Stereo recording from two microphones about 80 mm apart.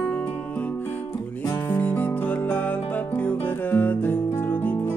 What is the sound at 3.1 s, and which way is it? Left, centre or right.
Guitar, centre.